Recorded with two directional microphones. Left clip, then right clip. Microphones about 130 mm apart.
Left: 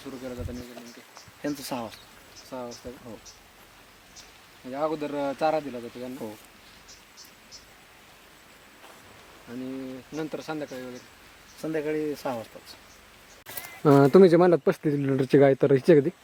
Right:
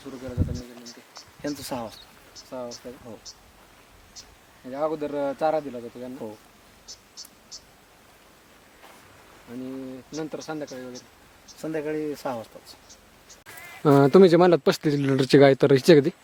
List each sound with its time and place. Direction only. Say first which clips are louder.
0.0 s speech: right 2 dB; centre (ahead or behind)
1.4 s speech: right 1 dB; 10° right (ahead or behind)
2.5 s speech: right 2 dB; 5° left (ahead or behind)
4.7 s speech: right 2 dB; centre (ahead or behind)
10.2 s speech: even; 5° left (ahead or behind)
11.6 s speech: even; 5° right (ahead or behind)
13.8 s speech: right 1 dB; centre (ahead or behind)
14.6 s speech: right 2 dB; 25° right (ahead or behind)